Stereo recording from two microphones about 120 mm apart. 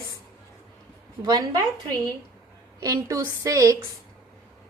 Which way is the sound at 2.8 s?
30° right (ahead or behind).